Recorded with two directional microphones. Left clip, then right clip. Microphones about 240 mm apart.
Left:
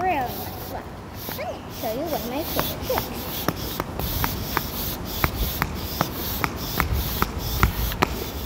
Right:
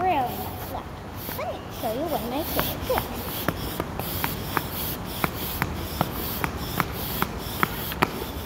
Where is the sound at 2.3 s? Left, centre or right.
Centre.